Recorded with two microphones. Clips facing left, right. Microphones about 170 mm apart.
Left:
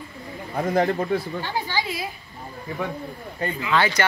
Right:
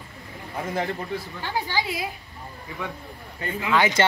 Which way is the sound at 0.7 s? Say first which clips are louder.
Left 7 dB; 40° left (ahead or behind).